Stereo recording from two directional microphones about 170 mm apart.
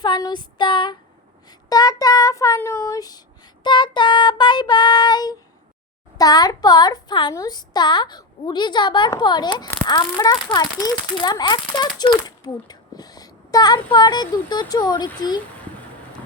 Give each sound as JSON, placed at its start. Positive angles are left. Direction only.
{"t": 0.0, "sound": "a woman's voice", "side_deg": 25}